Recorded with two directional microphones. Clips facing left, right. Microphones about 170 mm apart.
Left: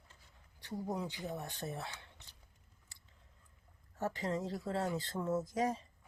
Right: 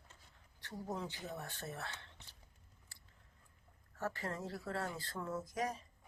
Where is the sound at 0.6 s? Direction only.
10° left (ahead or behind).